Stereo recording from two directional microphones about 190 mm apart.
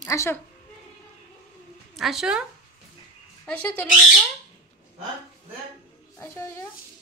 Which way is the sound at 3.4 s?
5° left (ahead or behind).